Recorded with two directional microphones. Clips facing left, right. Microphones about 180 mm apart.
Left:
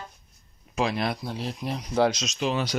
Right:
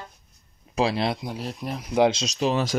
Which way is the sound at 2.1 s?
35° right (ahead or behind).